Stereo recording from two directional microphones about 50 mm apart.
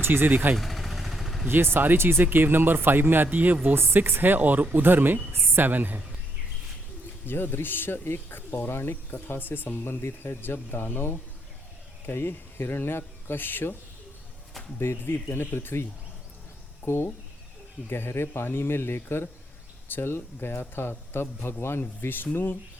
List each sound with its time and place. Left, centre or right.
0.0 s speech: right
0.5 s vehicle: centre
1.5 s speech: right
2.2 s speech: right
3.8 s speech: right
7.3 s speech: left
14.8 s speech: left